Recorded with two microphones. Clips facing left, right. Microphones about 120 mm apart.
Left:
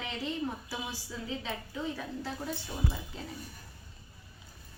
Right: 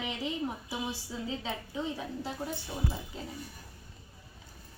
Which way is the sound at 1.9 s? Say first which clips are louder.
Right 1 dB; 15° right (ahead or behind).